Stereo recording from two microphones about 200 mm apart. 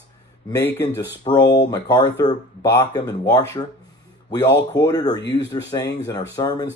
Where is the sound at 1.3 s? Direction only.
25° left (ahead or behind).